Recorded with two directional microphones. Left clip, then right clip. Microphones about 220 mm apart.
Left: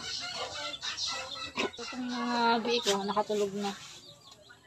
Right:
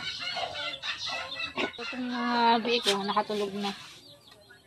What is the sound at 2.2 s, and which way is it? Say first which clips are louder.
Speech: right 4 dB; centre (ahead or behind).